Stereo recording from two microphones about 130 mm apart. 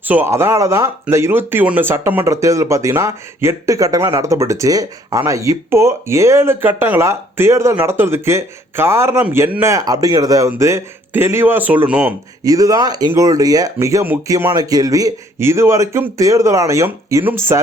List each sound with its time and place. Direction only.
0.0 s speech: 15° right (ahead or behind)
12.5 s speech: 25° right (ahead or behind)